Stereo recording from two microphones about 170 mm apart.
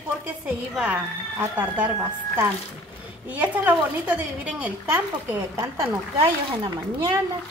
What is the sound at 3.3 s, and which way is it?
A woman's voice, 10° right (ahead or behind).